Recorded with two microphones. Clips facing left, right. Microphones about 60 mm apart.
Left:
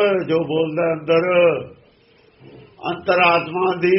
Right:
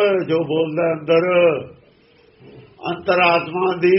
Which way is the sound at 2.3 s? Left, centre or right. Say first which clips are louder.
Even; left.